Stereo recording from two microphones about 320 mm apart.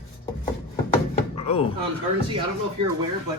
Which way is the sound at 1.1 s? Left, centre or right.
Centre.